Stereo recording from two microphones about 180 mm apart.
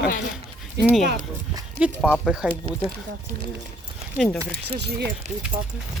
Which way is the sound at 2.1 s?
Centre (ahead or behind).